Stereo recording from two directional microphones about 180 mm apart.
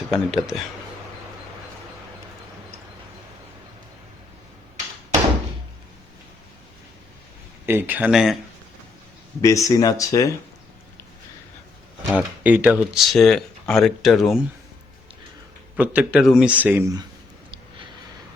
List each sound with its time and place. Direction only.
0.1 s speech: centre (ahead or behind)
7.7 s speech: 10° right (ahead or behind)
9.4 s speech: 20° left (ahead or behind)
12.1 s speech: 10° right (ahead or behind)
15.7 s speech: 10° right (ahead or behind)